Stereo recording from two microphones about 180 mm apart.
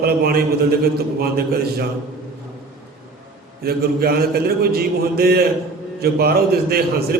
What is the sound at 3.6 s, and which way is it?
A man's voice, 60° right (ahead or behind).